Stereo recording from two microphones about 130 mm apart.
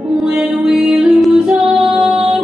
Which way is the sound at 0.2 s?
5° right (ahead or behind).